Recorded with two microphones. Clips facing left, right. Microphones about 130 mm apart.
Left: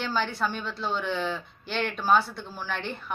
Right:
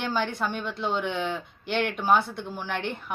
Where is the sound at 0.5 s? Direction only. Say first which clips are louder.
Right 2 dB; 15° right (ahead or behind).